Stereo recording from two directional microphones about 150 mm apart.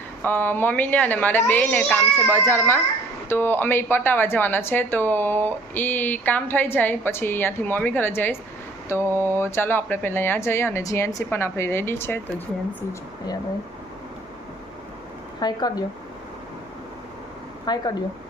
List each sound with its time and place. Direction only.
0.2 s speech: 10° left (ahead or behind)
15.4 s speech: 25° left (ahead or behind)
17.7 s speech: 25° left (ahead or behind)